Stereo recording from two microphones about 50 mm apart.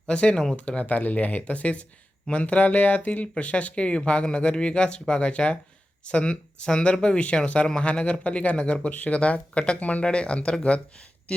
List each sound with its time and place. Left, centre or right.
0.1 s speech: left